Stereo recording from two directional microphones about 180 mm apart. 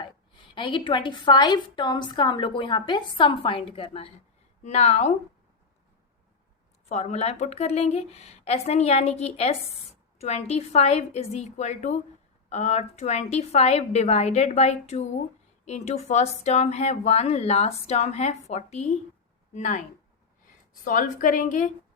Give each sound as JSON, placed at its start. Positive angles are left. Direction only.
{"t": 0.5, "sound": "a woman's voice", "side_deg": 25}
{"t": 6.8, "sound": "speech", "side_deg": 40}
{"t": 20.8, "sound": "a woman's voice", "side_deg": 50}